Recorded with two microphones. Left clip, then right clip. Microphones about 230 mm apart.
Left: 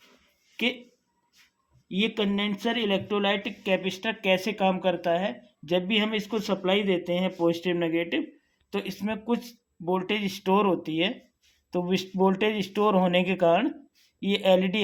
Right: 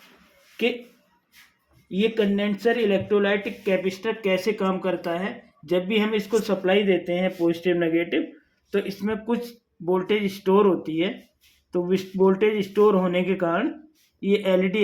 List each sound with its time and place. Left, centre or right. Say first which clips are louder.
2.4 s speech: right 6 dB; left